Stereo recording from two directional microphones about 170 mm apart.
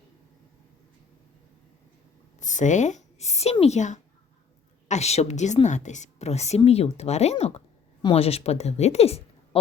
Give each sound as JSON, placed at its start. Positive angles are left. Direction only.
{"t": 2.4, "sound": "a woman's voice", "side_deg": 45}